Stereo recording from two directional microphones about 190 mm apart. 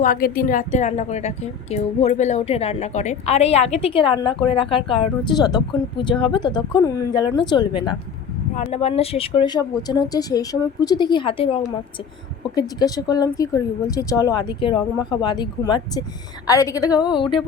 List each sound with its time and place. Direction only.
0.0 s a woman's voice: 45° left (ahead or behind); by 7.9 s 25° left (ahead or behind)
8.5 s a woman's voice: 35° left (ahead or behind)